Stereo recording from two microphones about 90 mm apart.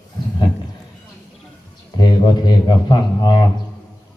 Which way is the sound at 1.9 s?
50° left (ahead or behind).